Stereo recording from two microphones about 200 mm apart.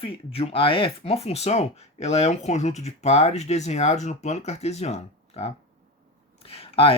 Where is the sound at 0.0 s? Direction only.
30° left (ahead or behind).